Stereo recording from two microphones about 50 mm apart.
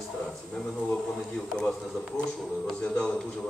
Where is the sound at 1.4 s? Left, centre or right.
Centre.